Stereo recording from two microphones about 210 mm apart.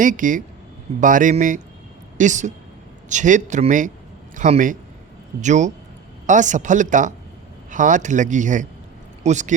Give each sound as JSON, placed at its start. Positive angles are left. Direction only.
{"t": 0.0, "sound": "speech", "side_deg": -40}